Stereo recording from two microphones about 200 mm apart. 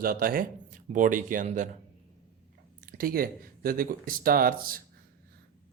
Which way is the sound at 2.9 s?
45° right (ahead or behind).